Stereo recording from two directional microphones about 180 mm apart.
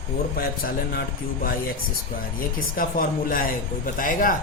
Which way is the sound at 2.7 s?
50° left (ahead or behind).